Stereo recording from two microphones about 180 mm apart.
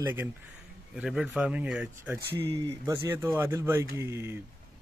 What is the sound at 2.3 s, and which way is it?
Speech, 25° right (ahead or behind).